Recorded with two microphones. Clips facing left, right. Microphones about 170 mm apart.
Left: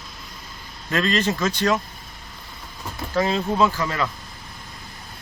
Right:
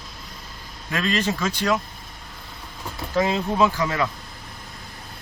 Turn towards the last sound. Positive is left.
turn(degrees=-15)  # may be behind; listen again after turning